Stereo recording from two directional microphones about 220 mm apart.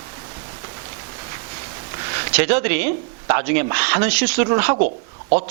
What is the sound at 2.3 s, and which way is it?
A woman's voice, 15° right (ahead or behind).